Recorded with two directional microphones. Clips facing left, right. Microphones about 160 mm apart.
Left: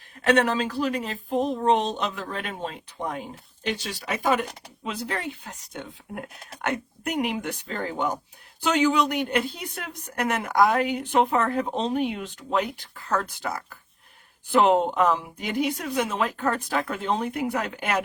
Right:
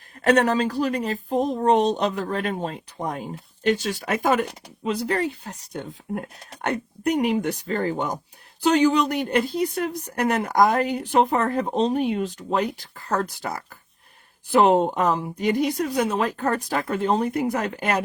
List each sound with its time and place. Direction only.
0.3 s a woman's voice: 40° right (ahead or behind)